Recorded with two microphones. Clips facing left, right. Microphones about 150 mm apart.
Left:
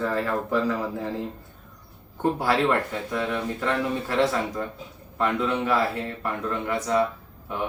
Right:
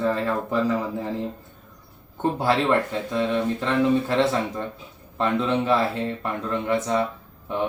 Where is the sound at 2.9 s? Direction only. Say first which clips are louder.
Right 4 dB; 20° right (ahead or behind).